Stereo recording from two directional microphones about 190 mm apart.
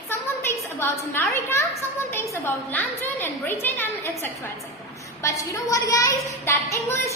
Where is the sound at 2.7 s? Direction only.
10° left (ahead or behind).